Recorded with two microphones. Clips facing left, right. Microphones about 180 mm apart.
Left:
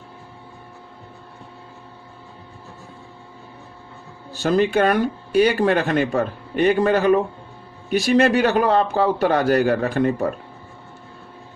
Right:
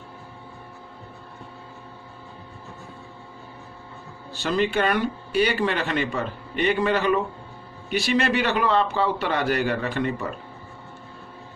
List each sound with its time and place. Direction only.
4.3 s speech: 45° left (ahead or behind)